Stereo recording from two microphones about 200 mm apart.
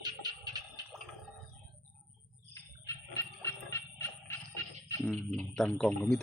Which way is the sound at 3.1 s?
15° left (ahead or behind).